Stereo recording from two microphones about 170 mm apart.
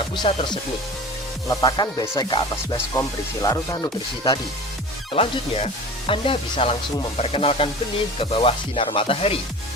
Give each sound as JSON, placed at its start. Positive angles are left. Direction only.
{"t": 0.2, "sound": "speech", "side_deg": 35}
{"t": 1.5, "sound": "speech", "side_deg": 25}
{"t": 5.1, "sound": "speech", "side_deg": 35}